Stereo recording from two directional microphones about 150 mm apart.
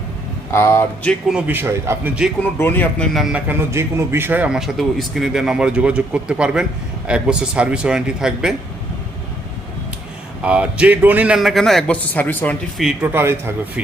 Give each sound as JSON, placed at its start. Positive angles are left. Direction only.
{"t": 0.5, "sound": "speech", "side_deg": 15}
{"t": 1.3, "sound": "a man's voice", "side_deg": -10}
{"t": 2.4, "sound": "speech", "side_deg": 15}
{"t": 3.1, "sound": "a man's voice", "side_deg": 0}
{"t": 10.4, "sound": "a man's voice", "side_deg": -10}
{"t": 12.8, "sound": "a man's voice", "side_deg": 0}
{"t": 13.1, "sound": "a man's voice", "side_deg": -15}